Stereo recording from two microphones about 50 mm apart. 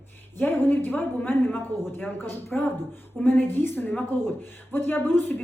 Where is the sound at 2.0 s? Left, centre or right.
Left.